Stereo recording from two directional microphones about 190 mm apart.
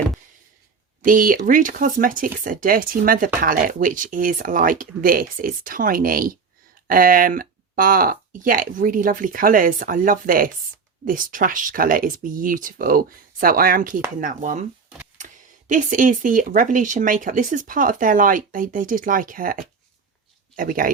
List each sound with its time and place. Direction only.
1.0 s speech: 45° right (ahead or behind)